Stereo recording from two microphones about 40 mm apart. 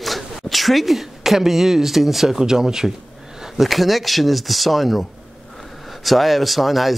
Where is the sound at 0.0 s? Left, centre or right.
Centre.